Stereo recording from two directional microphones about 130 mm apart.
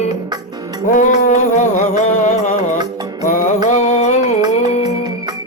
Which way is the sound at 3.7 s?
65° left (ahead or behind).